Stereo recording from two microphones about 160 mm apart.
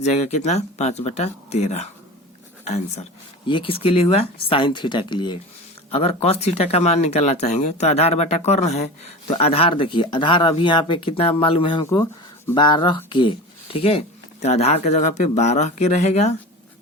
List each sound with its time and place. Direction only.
0.0 s speech: 45° left (ahead or behind); by 5.4 s 30° left (ahead or behind)
5.9 s speech: 40° left (ahead or behind)